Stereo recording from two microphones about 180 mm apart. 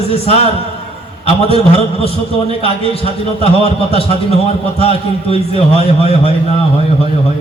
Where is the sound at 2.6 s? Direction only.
35° left (ahead or behind).